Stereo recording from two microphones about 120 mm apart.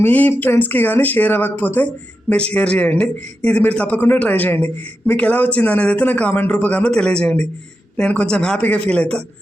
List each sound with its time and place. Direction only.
0.0 s speech: 15° left (ahead or behind)